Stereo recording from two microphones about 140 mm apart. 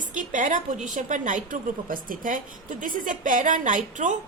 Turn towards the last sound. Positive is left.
turn(degrees=-65)  # may be behind; listen again after turning